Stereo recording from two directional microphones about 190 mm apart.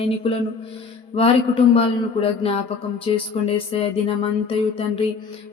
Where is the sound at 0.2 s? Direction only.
30° left (ahead or behind).